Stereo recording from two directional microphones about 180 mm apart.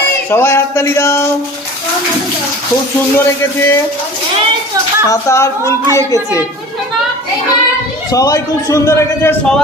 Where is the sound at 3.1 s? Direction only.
15° left (ahead or behind).